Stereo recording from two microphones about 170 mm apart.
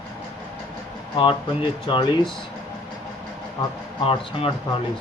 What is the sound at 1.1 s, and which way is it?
Speech, 30° left (ahead or behind).